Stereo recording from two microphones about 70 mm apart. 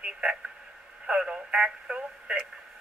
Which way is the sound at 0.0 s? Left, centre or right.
Centre.